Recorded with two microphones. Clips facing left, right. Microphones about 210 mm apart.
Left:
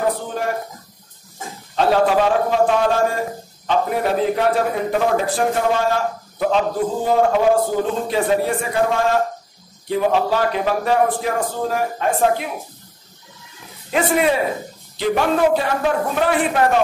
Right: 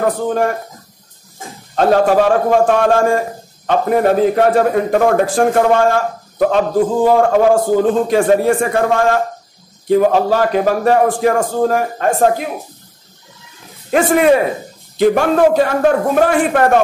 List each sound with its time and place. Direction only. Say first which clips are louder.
1.8 s a man's voice: right 4 dB; 45° right (ahead or behind)
13.8 s a man's voice: right 6 dB; 45° right (ahead or behind)